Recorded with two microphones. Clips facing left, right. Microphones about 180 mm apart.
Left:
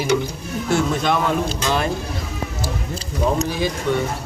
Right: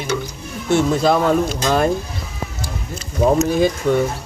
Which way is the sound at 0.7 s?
35° right (ahead or behind).